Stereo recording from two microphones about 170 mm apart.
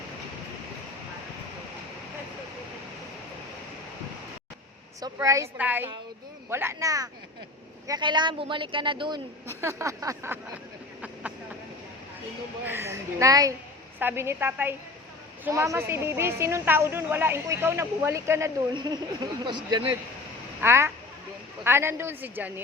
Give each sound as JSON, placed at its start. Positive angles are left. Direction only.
{"t": 4.9, "sound": "a woman's voice", "side_deg": -20}
{"t": 9.5, "sound": "a woman's voice", "side_deg": -15}
{"t": 12.6, "sound": "a woman's voice", "side_deg": -15}
{"t": 18.7, "sound": "speech", "side_deg": -25}
{"t": 20.6, "sound": "a woman's voice", "side_deg": -15}